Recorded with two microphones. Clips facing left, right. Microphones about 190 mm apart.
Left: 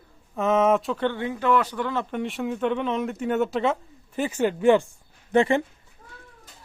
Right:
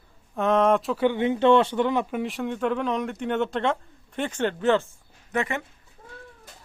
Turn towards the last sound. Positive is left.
turn(degrees=30)  # may be behind; listen again after turning